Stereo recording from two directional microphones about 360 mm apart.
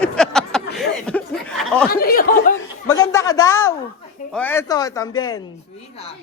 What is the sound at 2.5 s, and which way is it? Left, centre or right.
Chatter, centre.